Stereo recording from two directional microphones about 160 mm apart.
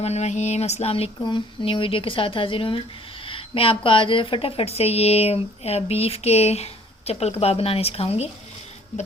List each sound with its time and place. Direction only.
0.0 s speech: 45° left (ahead or behind)